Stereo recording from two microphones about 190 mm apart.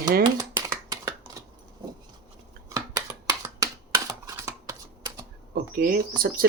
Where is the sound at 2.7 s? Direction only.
20° right (ahead or behind).